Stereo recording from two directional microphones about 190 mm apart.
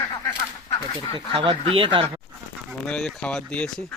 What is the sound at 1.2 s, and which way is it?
Speech, 25° right (ahead or behind).